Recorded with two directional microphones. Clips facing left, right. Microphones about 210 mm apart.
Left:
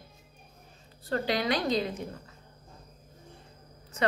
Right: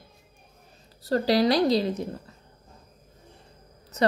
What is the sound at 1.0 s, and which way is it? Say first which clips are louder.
A woman's voice: right 7 dB; 35° right (ahead or behind).